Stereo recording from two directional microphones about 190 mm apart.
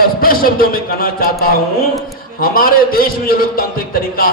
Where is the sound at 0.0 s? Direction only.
50° left (ahead or behind).